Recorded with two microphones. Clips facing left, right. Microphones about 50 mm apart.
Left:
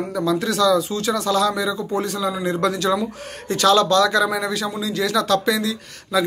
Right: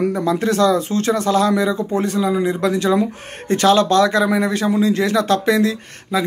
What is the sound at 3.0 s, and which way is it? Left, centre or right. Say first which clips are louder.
Speech: right 5 dB; right.